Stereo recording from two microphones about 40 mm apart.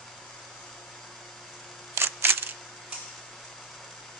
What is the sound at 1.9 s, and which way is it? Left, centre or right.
Single-lens reflex camera, right.